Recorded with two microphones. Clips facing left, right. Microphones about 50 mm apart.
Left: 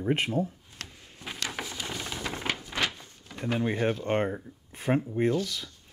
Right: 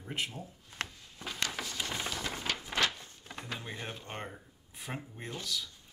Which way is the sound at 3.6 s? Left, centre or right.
Left.